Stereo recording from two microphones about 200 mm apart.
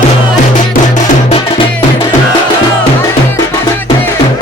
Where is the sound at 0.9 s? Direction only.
30° left (ahead or behind).